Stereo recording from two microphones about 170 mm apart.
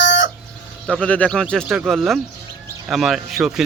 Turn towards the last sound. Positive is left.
turn(degrees=0)  # may be behind; listen again after turning